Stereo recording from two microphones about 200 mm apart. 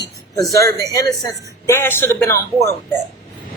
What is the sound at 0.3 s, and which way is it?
A man's voice, 15° left (ahead or behind).